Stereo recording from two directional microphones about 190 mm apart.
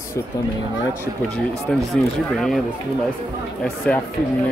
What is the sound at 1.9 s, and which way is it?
Speech, centre (ahead or behind).